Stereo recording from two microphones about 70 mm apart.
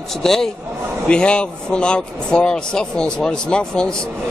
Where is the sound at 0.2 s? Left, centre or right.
Centre.